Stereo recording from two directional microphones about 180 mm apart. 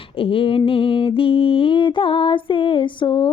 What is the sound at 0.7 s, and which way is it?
Music, 30° left (ahead or behind).